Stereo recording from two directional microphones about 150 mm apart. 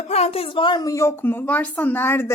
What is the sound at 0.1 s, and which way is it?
A woman's voice, 45° left (ahead or behind).